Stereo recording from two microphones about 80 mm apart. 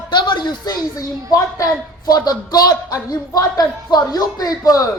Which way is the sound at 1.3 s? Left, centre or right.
Left.